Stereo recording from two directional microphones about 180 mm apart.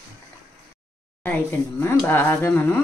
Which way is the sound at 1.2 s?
10° left (ahead or behind).